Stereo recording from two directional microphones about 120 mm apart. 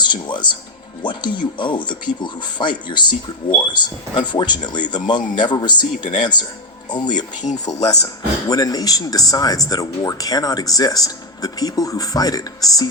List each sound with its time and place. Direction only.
0.0 s speech: 40° left (ahead or behind)